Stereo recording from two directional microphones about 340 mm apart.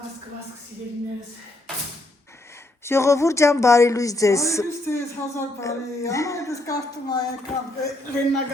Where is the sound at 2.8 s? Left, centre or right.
Centre.